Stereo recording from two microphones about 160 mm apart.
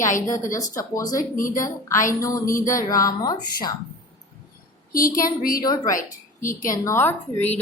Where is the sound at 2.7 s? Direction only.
20° left (ahead or behind).